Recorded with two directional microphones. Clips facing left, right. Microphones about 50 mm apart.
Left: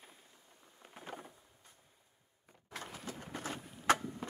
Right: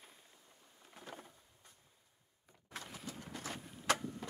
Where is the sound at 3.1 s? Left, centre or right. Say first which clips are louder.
Left 3 dB; left.